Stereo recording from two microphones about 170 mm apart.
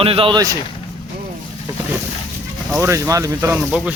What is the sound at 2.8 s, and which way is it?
Speech, 20° right (ahead or behind).